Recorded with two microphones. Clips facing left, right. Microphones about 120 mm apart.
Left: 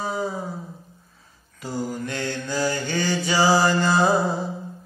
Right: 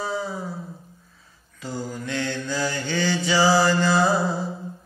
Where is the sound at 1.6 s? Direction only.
15° left (ahead or behind).